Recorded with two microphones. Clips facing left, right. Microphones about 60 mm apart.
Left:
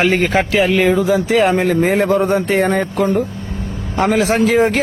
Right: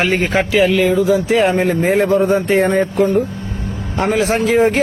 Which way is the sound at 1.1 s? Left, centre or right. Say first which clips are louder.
Even; left.